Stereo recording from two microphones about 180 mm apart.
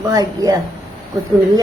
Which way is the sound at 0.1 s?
20° right (ahead or behind).